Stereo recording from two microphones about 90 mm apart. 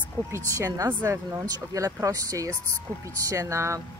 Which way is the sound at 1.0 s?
30° right (ahead or behind).